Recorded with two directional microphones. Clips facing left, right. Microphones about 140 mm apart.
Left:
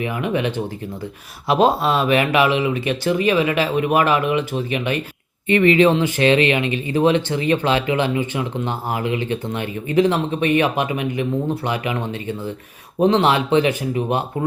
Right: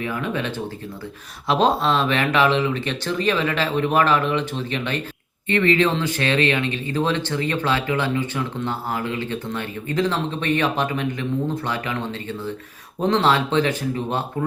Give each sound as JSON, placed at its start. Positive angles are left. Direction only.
{"t": 0.0, "sound": "speech", "side_deg": 15}